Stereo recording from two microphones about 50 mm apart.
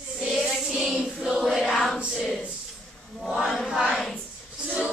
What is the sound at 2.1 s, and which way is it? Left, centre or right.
Speech, centre.